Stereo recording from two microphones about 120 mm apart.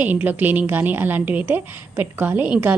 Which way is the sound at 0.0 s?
15° right (ahead or behind).